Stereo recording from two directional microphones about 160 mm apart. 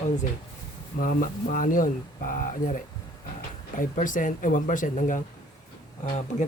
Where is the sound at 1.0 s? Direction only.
60° left (ahead or behind).